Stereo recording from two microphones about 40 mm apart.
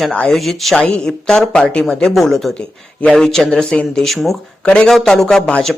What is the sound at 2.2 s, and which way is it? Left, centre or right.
Speech, centre.